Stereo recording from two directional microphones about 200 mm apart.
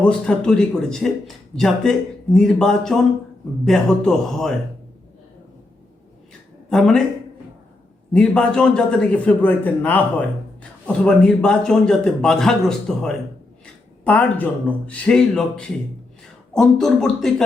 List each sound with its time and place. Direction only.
0.0 s speech: 5° left (ahead or behind)
6.7 s speech: centre (ahead or behind)
8.1 s a man's voice: 5° left (ahead or behind)